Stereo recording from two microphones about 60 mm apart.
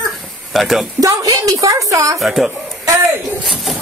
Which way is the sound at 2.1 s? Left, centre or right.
Centre.